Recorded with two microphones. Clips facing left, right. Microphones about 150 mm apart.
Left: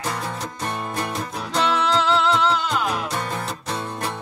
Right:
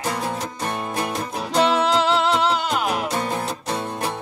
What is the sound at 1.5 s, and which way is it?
Music, 15° right (ahead or behind).